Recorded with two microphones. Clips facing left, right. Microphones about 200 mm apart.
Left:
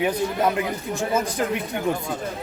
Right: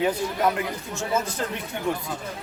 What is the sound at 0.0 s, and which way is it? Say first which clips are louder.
A man's voice: left 1 dB; 20° left (ahead or behind).